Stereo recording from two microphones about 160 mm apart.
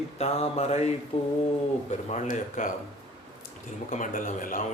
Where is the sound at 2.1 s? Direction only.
50° left (ahead or behind).